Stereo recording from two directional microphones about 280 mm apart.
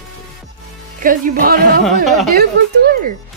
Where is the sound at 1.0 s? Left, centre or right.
Right.